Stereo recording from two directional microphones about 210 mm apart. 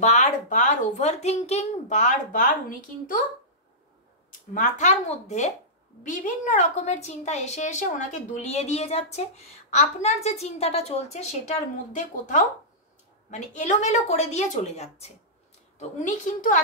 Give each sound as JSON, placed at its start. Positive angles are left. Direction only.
{"t": 0.0, "sound": "a woman's voice", "side_deg": 35}
{"t": 4.6, "sound": "a woman's voice", "side_deg": 35}